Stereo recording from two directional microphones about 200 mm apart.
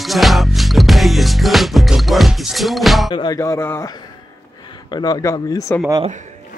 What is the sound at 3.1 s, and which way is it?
Speech, 20° left (ahead or behind).